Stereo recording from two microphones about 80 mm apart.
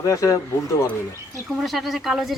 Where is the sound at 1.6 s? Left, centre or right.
Centre.